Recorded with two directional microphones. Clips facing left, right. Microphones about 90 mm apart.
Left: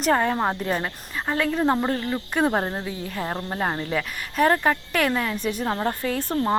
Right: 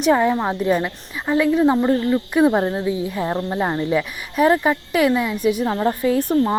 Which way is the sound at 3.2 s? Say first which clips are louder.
Right 3 dB; 5° right (ahead or behind).